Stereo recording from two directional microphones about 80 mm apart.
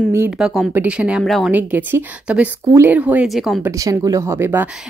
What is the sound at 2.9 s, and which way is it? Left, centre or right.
Speech, centre.